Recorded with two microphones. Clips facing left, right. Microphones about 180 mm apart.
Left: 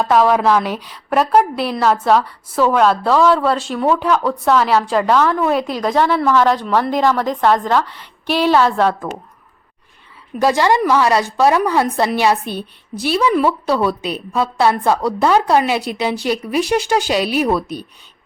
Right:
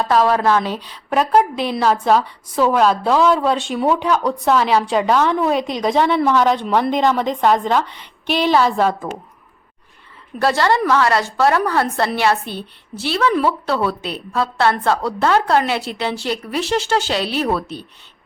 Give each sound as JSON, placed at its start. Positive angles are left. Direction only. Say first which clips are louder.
{"t": 0.0, "sound": "a woman's voice", "louder": "left 2 dB", "side_deg": 10}
{"t": 3.1, "sound": "a woman's voice", "louder": "left 2 dB", "side_deg": -10}
{"t": 3.3, "sound": "a woman's voice", "louder": "left 1 dB", "side_deg": 0}
{"t": 6.1, "sound": "a woman's voice", "louder": "left 1 dB", "side_deg": -15}
{"t": 10.3, "sound": "a woman's voice", "louder": "left 2 dB", "side_deg": 15}